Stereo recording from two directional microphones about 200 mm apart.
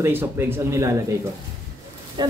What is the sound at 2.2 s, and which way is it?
Speech, 20° right (ahead or behind).